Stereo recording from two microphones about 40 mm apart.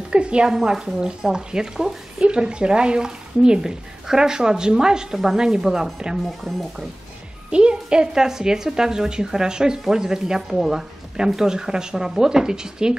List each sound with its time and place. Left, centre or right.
0.1 s speech: right
0.5 s speech: centre
6.5 s speech: centre
7.5 s speech: right